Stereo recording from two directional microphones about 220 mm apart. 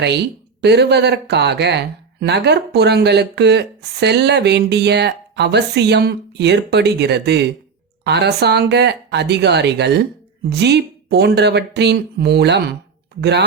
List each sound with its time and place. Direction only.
0.0 s speech: 50° right (ahead or behind)